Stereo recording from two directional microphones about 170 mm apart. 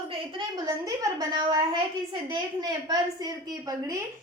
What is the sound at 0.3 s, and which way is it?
A woman's voice, 20° right (ahead or behind).